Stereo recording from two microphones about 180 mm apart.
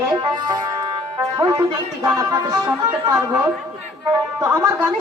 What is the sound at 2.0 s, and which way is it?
Music, 15° right (ahead or behind).